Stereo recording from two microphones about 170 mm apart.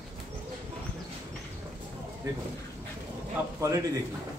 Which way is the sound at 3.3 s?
20° right (ahead or behind).